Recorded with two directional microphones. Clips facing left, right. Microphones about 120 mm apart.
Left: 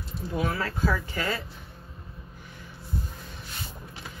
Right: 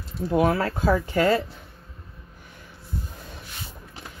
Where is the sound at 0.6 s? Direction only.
40° right (ahead or behind).